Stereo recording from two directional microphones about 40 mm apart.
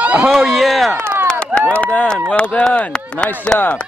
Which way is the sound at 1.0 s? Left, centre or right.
Right.